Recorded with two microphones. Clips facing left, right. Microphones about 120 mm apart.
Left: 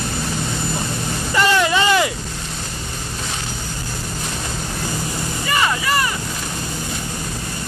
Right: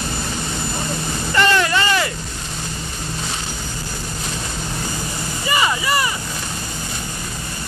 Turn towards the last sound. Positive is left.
turn(degrees=-5)  # may be behind; listen again after turning